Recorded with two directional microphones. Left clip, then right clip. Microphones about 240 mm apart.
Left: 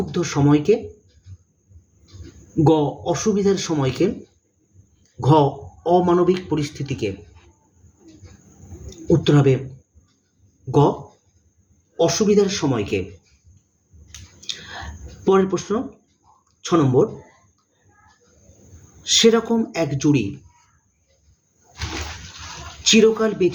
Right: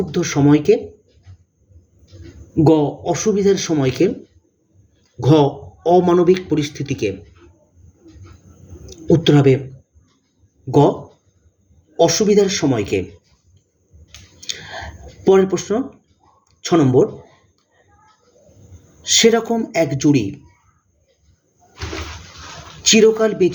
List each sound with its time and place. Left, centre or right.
0.1 s speech: centre
2.6 s speech: centre
5.2 s speech: centre
9.0 s speech: centre
10.7 s speech: centre
11.9 s speech: centre
14.4 s a sound: centre
16.6 s speech: centre
19.0 s speech: centre
22.8 s speech: centre